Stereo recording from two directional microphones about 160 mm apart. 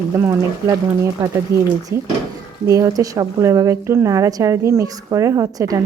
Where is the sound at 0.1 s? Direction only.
20° right (ahead or behind).